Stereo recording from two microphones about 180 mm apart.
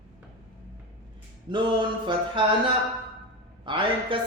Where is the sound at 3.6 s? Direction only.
30° right (ahead or behind).